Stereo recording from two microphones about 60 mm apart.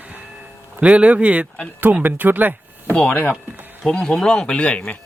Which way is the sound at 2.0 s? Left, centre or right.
Right.